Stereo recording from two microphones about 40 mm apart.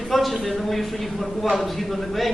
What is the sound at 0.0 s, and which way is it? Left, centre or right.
A man's voice, centre.